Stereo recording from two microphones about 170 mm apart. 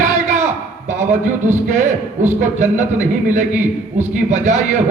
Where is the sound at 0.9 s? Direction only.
45° right (ahead or behind).